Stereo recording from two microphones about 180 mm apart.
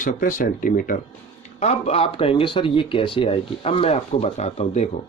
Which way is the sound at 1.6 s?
35° left (ahead or behind).